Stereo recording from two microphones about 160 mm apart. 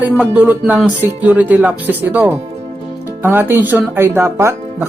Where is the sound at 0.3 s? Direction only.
10° right (ahead or behind).